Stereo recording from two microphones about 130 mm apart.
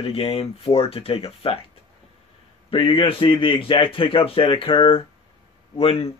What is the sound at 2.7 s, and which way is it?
Speech, 45° left (ahead or behind).